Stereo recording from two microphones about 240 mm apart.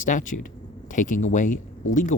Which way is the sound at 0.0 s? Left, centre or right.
Left.